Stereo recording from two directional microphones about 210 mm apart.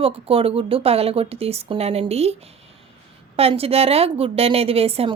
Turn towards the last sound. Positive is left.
turn(degrees=-30)  # may be behind; listen again after turning